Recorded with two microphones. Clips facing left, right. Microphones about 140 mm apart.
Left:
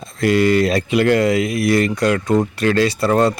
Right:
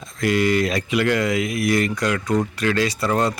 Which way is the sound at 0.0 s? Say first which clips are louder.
Left 4 dB; 30° left (ahead or behind).